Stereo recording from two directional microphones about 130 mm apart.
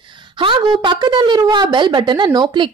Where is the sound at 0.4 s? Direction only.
40° right (ahead or behind).